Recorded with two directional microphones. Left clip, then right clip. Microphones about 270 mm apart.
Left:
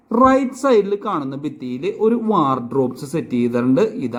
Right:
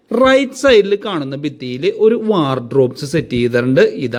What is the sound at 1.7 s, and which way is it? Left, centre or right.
Speech, right.